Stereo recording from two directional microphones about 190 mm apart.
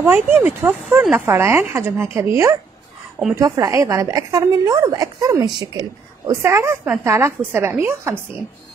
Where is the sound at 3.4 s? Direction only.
15° right (ahead or behind).